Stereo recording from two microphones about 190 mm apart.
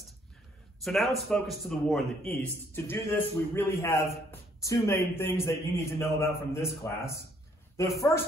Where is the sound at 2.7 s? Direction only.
10° left (ahead or behind).